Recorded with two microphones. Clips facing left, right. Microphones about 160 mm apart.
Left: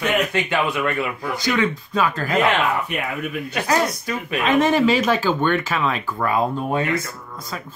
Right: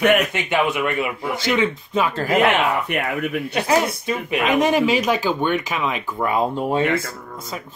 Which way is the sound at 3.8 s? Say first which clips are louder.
Even; 20° right (ahead or behind).